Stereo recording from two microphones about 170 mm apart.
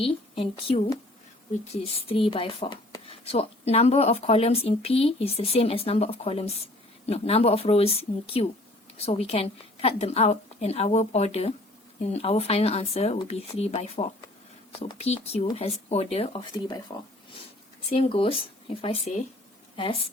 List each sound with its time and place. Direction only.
0.0 s speech: 35° left (ahead or behind)
17.9 s a woman's voice: 35° left (ahead or behind)